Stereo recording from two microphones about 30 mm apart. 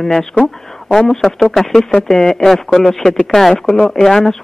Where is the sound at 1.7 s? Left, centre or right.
Centre.